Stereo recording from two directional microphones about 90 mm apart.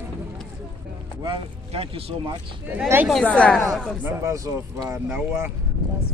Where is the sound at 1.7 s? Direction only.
90° right.